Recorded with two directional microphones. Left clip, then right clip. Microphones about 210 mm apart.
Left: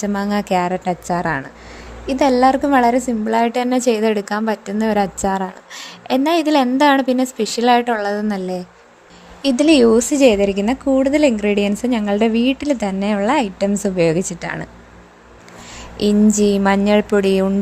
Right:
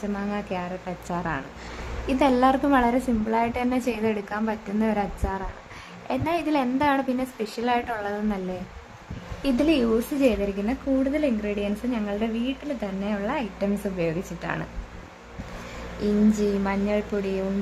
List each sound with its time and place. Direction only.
0.0 s a woman's voice: 35° left (ahead or behind)
2.0 s a woman's voice: 20° left (ahead or behind)
9.4 s a woman's voice: 30° left (ahead or behind)
16.0 s a woman's voice: 30° left (ahead or behind)